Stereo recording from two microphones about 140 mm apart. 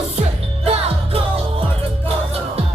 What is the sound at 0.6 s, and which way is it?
Music, 45° right (ahead or behind).